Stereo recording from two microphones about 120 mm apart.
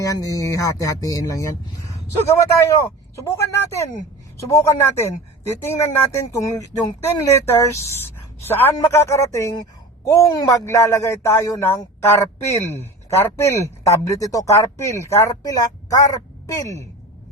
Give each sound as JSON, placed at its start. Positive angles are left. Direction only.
{"t": 0.0, "sound": "speech", "side_deg": 30}
{"t": 2.6, "sound": "a man's voice", "side_deg": 20}